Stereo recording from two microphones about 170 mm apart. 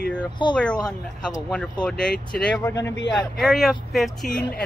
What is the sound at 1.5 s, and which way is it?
Speech, 5° left (ahead or behind).